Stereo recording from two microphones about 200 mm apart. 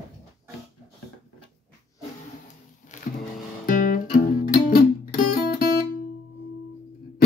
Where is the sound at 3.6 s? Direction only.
45° left (ahead or behind).